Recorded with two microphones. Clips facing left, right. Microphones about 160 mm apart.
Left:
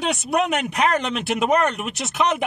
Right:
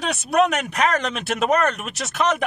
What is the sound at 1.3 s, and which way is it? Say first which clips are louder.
Speech: even; 15° left (ahead or behind).